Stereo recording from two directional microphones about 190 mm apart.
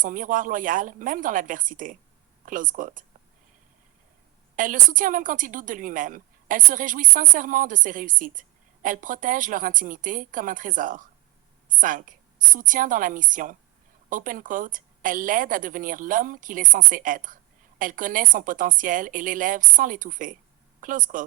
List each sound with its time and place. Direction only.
0.0 s a woman's voice: 45° right (ahead or behind)
4.5 s a woman's voice: 45° right (ahead or behind)